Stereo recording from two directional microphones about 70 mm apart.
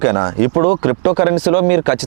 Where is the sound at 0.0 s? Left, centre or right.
Centre.